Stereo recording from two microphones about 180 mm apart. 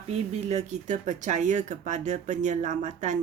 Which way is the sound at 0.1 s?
35° right (ahead or behind).